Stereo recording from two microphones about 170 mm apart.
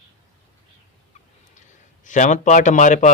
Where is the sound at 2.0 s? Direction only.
45° left (ahead or behind).